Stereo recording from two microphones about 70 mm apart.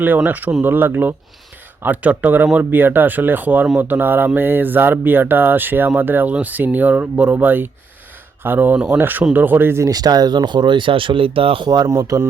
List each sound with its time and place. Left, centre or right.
0.3 s speech: right
9.8 s speech: right
11.9 s speech: right